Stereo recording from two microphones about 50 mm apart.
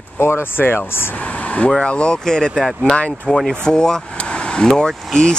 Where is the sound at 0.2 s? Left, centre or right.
Left.